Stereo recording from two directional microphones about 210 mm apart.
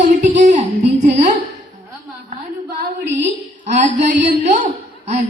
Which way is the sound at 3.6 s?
35° right (ahead or behind).